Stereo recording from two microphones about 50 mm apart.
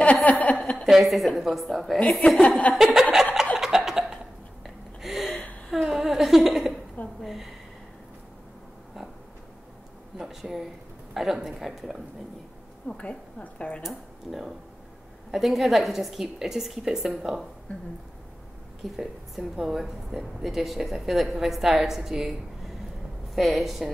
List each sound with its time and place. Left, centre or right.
0.0 s a sound: left
0.8 s a woman's voice: centre
2.4 s a woman's voice: left
2.7 s laughter: centre
3.5 s a sound: centre
4.6 s gasp: centre
5.9 s a sound: centre
7.2 s a woman's voice: centre
10.1 s a sound: centre
11.1 s a woman's voice: centre
12.8 s a woman's voice: left
13.8 s a woman's voice: centre
17.7 s a woman's voice: left
18.8 s a woman's voice: centre